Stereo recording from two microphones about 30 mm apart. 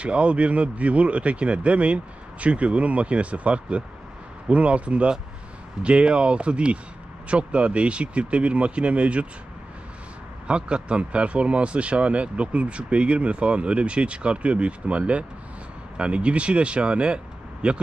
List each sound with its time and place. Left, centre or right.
0.0 s speech: right
10.4 s speech: right